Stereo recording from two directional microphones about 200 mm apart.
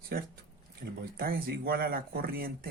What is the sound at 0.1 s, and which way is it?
Speech, 50° right (ahead or behind).